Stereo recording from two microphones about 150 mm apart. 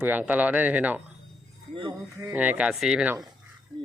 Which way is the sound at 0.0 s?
10° right (ahead or behind).